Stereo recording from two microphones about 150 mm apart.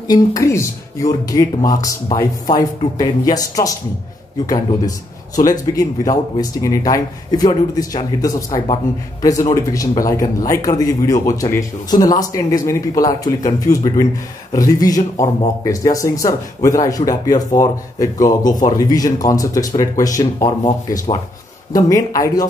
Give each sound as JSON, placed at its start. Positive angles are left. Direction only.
{"t": 0.1, "sound": "a man's voice", "side_deg": 20}
{"t": 21.7, "sound": "speech", "side_deg": 25}